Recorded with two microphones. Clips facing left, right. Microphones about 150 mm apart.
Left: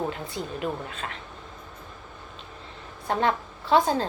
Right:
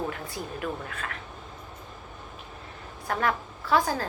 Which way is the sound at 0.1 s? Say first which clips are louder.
Left 2 dB; 20° left (ahead or behind).